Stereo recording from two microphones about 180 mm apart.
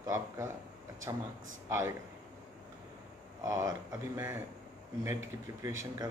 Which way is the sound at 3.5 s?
20° right (ahead or behind).